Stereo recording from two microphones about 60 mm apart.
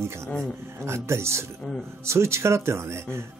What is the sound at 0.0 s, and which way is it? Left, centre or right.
Speech, right.